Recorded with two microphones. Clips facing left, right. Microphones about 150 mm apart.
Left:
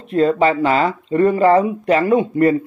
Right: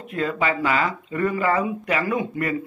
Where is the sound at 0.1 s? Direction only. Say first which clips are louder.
Left 9 dB; 30° left (ahead or behind).